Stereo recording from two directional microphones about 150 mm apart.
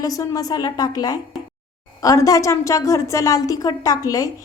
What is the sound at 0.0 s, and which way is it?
A woman's voice, 20° left (ahead or behind).